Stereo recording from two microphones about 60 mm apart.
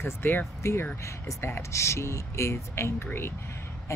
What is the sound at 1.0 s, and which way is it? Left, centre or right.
Speech, left.